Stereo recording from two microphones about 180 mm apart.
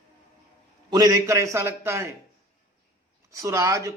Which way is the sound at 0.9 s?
20° right (ahead or behind).